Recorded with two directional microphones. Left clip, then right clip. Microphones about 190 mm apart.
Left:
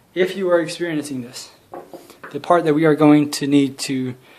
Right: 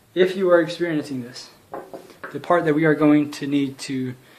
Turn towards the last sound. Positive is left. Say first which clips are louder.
# left 4 dB
turn(degrees=40)  # may be behind; listen again after turning